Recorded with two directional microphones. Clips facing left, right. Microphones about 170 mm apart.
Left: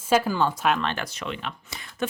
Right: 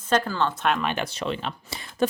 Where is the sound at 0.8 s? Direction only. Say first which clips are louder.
Right 2 dB; 15° right (ahead or behind).